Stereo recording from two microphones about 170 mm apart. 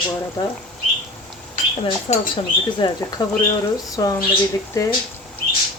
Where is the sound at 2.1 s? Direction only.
40° left (ahead or behind).